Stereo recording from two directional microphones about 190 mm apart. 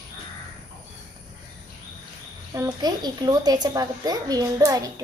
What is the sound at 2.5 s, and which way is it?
A woman's voice, 20° right (ahead or behind).